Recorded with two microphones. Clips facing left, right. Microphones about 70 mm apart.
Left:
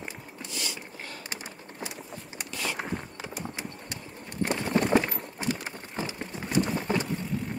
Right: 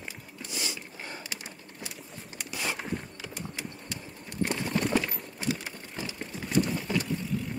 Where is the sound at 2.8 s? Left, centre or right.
Left.